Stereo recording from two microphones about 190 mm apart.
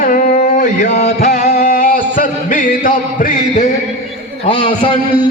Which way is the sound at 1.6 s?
50° left (ahead or behind).